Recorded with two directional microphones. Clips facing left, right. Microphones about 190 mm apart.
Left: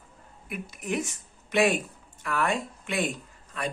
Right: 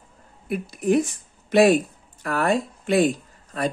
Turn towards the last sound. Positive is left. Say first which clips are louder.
# right 8 dB
turn(degrees=-35)  # may be behind; listen again after turning